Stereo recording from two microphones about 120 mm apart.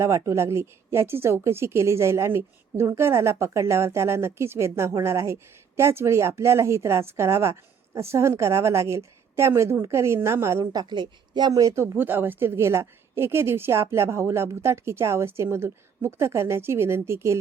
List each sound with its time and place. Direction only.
0.0 s a woman's voice: 25° right (ahead or behind)